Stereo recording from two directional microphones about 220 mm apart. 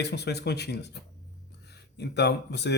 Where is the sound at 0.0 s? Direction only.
50° left (ahead or behind).